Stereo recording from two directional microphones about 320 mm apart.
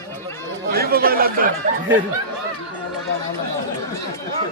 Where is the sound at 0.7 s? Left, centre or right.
Right.